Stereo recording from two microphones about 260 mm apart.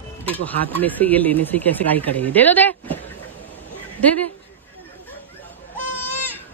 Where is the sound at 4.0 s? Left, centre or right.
Centre.